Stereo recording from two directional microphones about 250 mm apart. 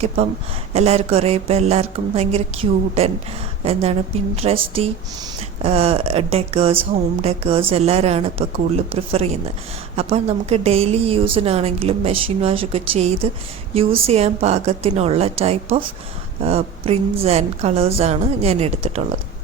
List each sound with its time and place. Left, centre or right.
0.7 s a woman's voice: right